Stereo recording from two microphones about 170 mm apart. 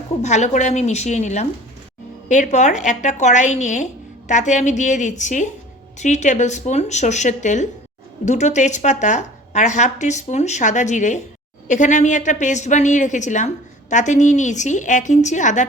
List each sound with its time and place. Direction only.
0.2 s speech: 45° left (ahead or behind)